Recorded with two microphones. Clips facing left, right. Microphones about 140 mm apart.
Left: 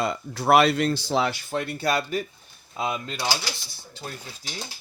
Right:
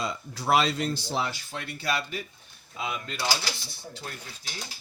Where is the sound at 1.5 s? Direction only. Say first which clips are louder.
Left 7 dB; 45° left (ahead or behind).